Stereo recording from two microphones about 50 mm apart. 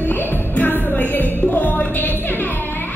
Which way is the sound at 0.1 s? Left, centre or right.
Left.